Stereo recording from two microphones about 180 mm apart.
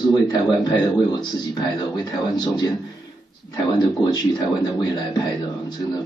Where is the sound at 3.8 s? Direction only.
20° left (ahead or behind).